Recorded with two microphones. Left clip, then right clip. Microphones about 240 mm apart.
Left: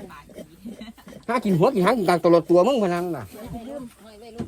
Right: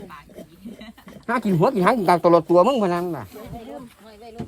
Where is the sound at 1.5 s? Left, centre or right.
Centre.